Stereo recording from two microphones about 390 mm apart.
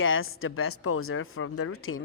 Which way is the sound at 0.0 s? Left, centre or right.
Left.